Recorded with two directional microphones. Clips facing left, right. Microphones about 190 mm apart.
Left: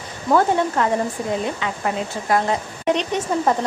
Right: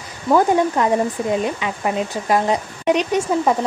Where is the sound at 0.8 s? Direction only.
15° right (ahead or behind).